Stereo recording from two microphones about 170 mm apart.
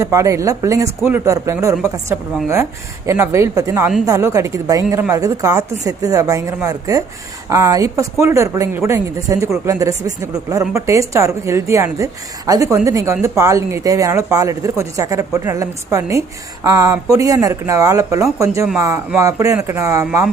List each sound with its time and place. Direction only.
0.0 s a woman's voice: 20° right (ahead or behind)